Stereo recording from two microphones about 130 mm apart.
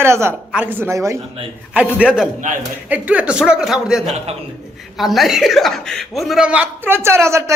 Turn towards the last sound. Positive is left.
turn(degrees=-20)  # may be behind; listen again after turning